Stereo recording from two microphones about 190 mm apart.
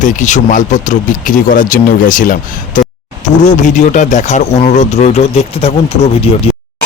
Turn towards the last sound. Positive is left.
turn(degrees=30)  # may be behind; listen again after turning